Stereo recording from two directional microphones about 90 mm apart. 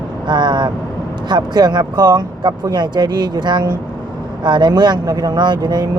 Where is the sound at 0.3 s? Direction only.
55° right (ahead or behind).